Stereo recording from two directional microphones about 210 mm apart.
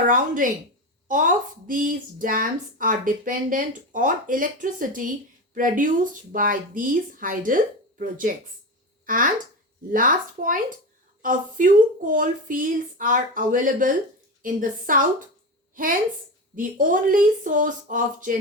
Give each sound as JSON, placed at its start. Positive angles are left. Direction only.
{"t": 0.4, "sound": "a woman's voice", "side_deg": -40}